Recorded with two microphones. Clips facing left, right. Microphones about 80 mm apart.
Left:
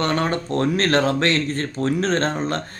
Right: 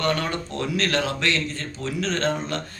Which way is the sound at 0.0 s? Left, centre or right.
Left.